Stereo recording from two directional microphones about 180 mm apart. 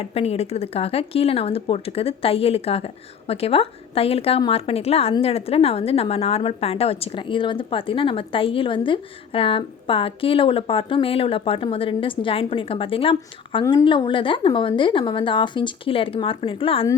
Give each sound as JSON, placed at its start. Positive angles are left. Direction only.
{"t": 0.0, "sound": "a woman's voice", "side_deg": 35}